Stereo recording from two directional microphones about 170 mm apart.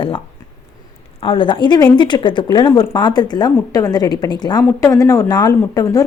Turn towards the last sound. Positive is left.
turn(degrees=20)  # may be behind; listen again after turning